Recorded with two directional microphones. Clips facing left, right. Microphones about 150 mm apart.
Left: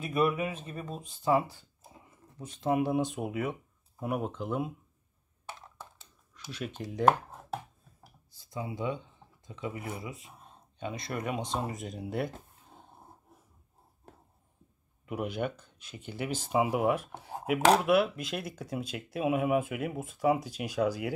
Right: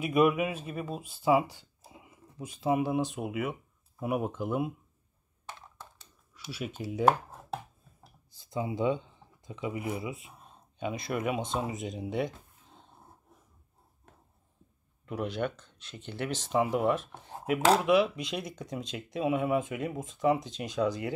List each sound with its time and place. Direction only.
0.0 s speech: 15° right (ahead or behind)
6.3 s a sound: 5° right (ahead or behind)
8.4 s speech: 20° right (ahead or behind); by 12.4 s 5° left (ahead or behind)
15.0 s speech: 10° left (ahead or behind)